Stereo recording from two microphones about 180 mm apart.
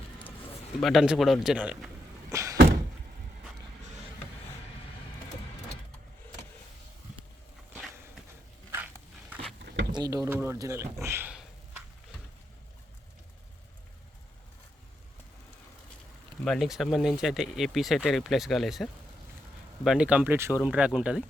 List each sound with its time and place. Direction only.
0.8 s speech: centre (ahead or behind)
2.3 s thunk: 15° right (ahead or behind)
9.9 s speech: 20° right (ahead or behind)
16.4 s speech: centre (ahead or behind)